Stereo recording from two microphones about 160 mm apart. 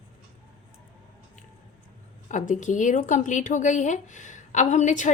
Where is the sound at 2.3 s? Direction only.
50° left (ahead or behind).